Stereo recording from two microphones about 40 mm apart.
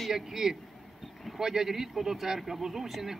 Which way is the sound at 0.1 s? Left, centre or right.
Centre.